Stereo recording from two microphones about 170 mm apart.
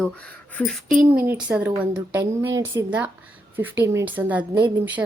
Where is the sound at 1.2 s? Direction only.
10° right (ahead or behind).